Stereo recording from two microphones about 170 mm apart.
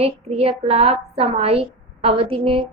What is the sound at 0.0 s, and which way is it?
A woman's voice, 35° right (ahead or behind).